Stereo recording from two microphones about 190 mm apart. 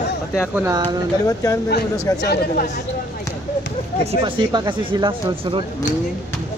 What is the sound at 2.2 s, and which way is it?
Speech, 60° left (ahead or behind).